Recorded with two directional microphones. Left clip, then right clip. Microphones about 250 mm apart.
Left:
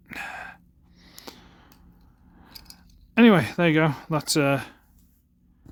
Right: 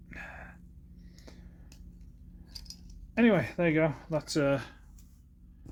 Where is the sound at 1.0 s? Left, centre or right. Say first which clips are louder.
Left 12 dB; left.